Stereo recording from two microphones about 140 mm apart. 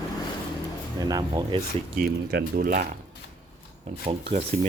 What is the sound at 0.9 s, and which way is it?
Speech, 30° right (ahead or behind).